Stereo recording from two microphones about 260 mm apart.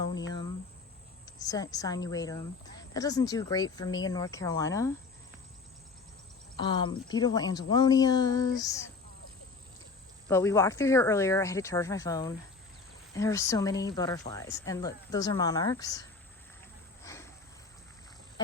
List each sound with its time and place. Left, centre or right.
0.3 s cricket: centre
1.2 s speech: centre
6.6 s speech: centre
10.2 s speech: centre
17.0 s a sound: centre